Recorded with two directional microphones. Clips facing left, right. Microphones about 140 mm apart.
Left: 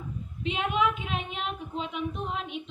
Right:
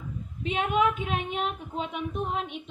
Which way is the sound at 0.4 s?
45° right (ahead or behind).